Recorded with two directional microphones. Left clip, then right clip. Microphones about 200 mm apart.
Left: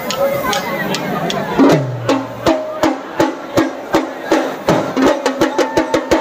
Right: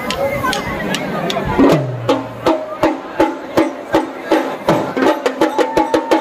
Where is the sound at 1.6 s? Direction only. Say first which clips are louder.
Left 1 dB; 5° right (ahead or behind).